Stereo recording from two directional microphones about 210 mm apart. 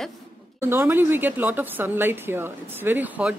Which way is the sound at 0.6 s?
10° right (ahead or behind).